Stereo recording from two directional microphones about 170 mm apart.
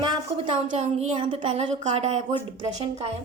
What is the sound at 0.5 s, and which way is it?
A woman's voice, 40° right (ahead or behind).